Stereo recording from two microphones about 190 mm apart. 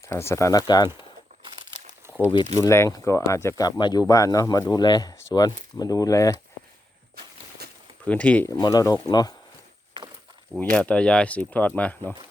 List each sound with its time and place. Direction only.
0.0 s speech: 15° left (ahead or behind)
2.6 s speech: 15° left (ahead or behind)
7.6 s a sound: 55° right (ahead or behind)
8.0 s speech: 10° left (ahead or behind)
8.5 s speech: 20° left (ahead or behind)
10.6 s speech: 5° left (ahead or behind)